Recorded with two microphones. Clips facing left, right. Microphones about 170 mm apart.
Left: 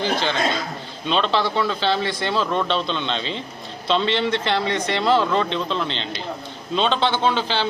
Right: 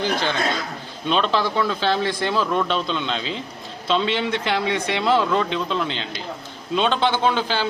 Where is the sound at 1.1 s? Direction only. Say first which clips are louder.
Even; 5° right (ahead or behind).